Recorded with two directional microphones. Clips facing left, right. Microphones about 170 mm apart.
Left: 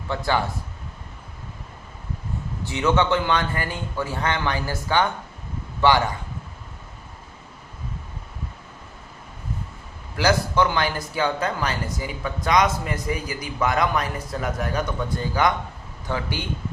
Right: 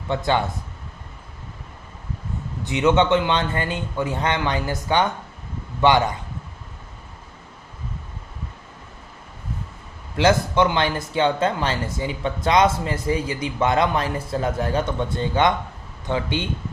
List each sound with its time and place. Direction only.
0.1 s speech: 20° right (ahead or behind)
2.6 s speech: 20° right (ahead or behind)
10.2 s speech: 20° right (ahead or behind)